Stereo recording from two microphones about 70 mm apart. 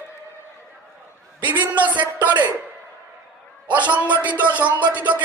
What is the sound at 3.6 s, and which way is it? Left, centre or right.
A man's voice, right.